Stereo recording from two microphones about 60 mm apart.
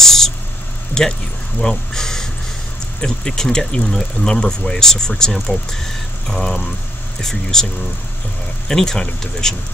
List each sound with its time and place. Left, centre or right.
0.0 s a sound: centre
3.0 s speech: centre
8.6 s speech: centre